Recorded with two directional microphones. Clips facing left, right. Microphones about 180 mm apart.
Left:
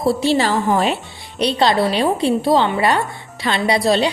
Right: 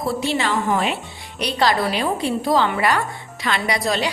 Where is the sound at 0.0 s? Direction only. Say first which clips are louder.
Left 6 dB; 30° left (ahead or behind).